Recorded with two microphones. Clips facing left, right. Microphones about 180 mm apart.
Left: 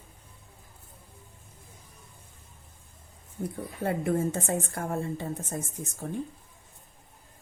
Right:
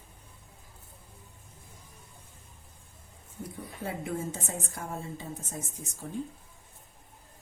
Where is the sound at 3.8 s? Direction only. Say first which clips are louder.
Left 7 dB; 55° left (ahead or behind).